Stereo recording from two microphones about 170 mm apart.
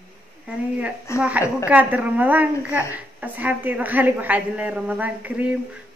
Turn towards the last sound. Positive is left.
turn(degrees=-10)  # may be behind; listen again after turning